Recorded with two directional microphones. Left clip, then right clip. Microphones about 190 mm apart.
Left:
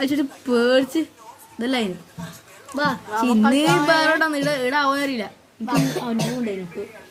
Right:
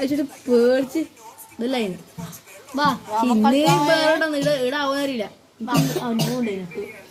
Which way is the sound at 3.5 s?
40° left (ahead or behind).